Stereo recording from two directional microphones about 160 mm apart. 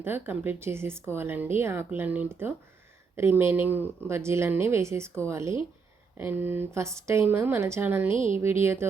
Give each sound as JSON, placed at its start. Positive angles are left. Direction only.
{"t": 0.0, "sound": "speech", "side_deg": -15}
{"t": 8.1, "sound": "speech", "side_deg": 35}
{"t": 8.4, "sound": "speech", "side_deg": -15}